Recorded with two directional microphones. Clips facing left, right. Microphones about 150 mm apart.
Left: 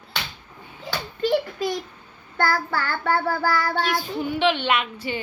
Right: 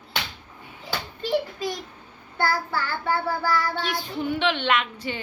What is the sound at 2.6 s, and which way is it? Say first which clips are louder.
Child singing: left 2 dB; 65° left (ahead or behind).